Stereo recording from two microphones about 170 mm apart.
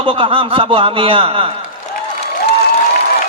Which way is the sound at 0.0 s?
30° right (ahead or behind).